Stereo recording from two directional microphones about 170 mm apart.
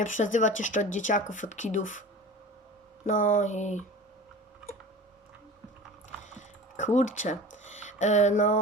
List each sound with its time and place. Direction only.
0.0 s speech: 50° left (ahead or behind)
3.1 s speech: 50° left (ahead or behind)
6.3 s speech: 45° left (ahead or behind)